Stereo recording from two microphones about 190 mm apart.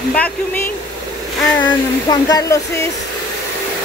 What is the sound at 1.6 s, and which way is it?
Speech, 20° left (ahead or behind).